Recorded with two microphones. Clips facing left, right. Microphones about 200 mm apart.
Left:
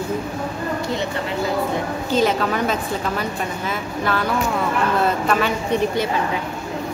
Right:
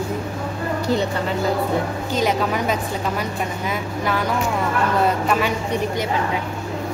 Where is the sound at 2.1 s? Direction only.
15° right (ahead or behind).